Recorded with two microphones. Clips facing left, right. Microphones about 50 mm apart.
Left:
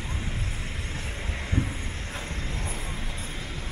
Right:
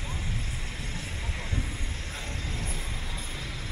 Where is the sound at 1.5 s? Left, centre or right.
Left.